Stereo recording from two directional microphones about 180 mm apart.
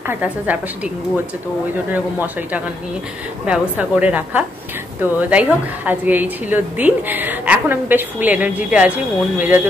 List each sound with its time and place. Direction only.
0.0 s a woman's voice: 10° right (ahead or behind)
3.4 s a woman's voice: 5° right (ahead or behind)